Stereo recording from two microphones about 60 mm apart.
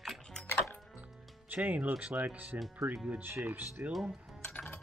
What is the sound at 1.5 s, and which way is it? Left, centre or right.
Speech, right.